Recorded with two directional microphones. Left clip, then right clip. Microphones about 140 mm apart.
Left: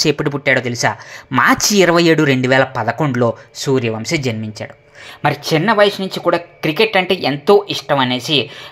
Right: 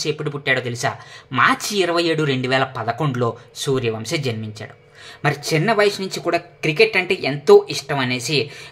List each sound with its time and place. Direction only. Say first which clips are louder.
0.0 s speech: left 7 dB; 50° left (ahead or behind)
1.4 s speech: left 5 dB; 50° left (ahead or behind); by 4.6 s 30° left (ahead or behind)
5.2 s speech: left 4 dB; 15° left (ahead or behind)